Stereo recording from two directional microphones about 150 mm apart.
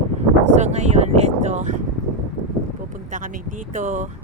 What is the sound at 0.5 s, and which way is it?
Speech, 50° right (ahead or behind).